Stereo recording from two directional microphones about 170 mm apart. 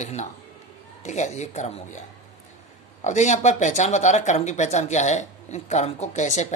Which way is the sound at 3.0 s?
45° left (ahead or behind).